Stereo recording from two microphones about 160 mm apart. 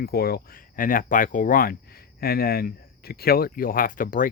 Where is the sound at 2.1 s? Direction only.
70° left (ahead or behind).